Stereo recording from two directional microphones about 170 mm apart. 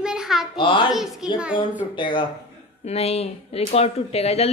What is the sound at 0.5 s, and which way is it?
Speech, 30° left (ahead or behind).